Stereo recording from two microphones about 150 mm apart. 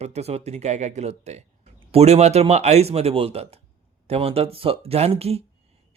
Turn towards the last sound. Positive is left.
turn(degrees=-40)  # may be behind; listen again after turning